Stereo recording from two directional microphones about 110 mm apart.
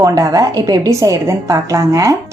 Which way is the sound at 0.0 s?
30° right (ahead or behind).